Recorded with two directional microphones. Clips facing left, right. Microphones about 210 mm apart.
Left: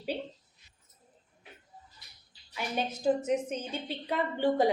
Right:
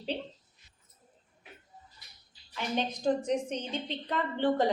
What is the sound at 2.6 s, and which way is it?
A woman's voice, 10° left (ahead or behind).